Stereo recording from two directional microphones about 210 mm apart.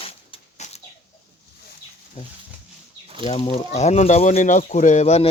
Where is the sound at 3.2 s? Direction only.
30° left (ahead or behind).